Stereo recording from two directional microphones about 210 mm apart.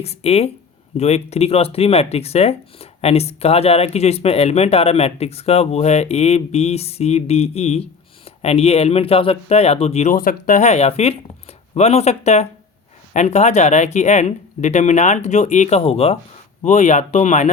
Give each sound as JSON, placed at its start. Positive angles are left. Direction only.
{"t": 0.0, "sound": "speech", "side_deg": 30}